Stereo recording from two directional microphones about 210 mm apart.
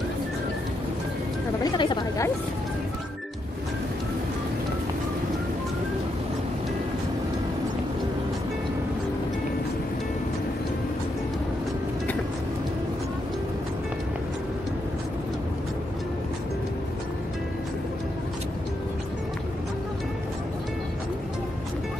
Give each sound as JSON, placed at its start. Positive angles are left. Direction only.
{"t": 1.6, "sound": "chatter", "side_deg": 20}